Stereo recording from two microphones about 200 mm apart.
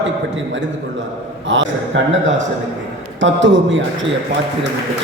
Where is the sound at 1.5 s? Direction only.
65° right (ahead or behind).